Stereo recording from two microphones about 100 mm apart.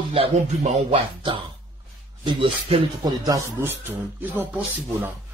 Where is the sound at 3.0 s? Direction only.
45° right (ahead or behind).